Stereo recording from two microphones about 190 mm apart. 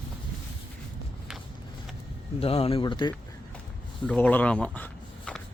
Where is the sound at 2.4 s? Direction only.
30° left (ahead or behind).